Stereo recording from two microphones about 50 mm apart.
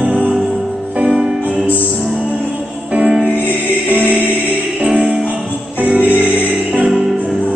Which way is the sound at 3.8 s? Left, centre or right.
Right.